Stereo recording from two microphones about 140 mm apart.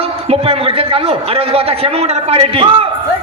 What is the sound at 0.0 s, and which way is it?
A man's voice, 45° right (ahead or behind).